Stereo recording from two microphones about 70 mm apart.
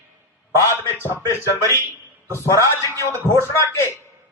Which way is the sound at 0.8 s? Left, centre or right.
Left.